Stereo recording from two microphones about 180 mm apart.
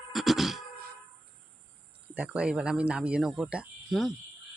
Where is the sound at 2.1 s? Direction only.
5° right (ahead or behind).